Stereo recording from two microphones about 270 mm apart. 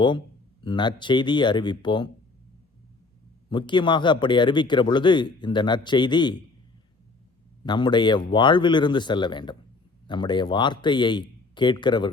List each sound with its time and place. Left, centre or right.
0.6 s speech: centre
3.5 s speech: centre
7.6 s speech: centre